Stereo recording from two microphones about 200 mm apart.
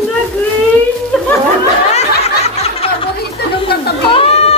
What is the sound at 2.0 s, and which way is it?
Snicker, 30° left (ahead or behind).